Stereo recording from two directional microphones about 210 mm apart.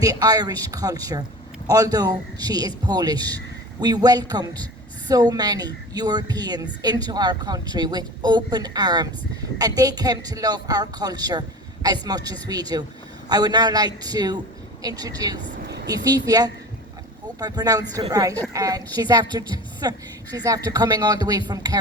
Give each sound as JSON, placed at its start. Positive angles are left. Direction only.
{"t": 0.0, "sound": "a woman's voice", "side_deg": -15}
{"t": 15.6, "sound": "a sound", "side_deg": -50}
{"t": 15.9, "sound": "a woman's voice", "side_deg": -20}